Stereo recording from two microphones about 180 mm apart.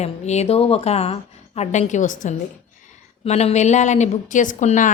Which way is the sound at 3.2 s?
35° left (ahead or behind).